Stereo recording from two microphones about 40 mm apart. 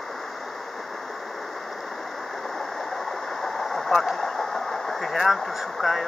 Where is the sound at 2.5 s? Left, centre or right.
Centre.